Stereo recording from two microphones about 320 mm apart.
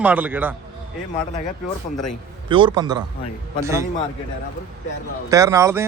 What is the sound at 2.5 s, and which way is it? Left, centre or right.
A man's voice, centre.